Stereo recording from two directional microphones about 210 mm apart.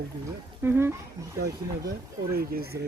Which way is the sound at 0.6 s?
10° right (ahead or behind).